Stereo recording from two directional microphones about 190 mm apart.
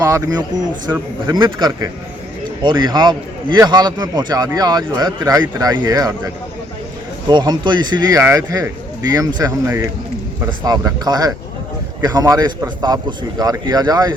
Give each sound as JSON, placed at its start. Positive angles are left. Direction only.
{"t": 0.0, "sound": "a man's voice", "side_deg": -20}